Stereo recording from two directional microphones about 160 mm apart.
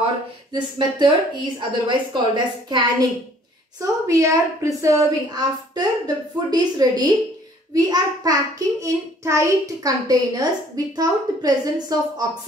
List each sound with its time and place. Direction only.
0.5 s a woman's voice: 25° right (ahead or behind)